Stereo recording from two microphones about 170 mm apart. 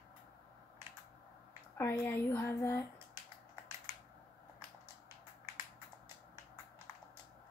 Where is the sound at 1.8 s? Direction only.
10° left (ahead or behind).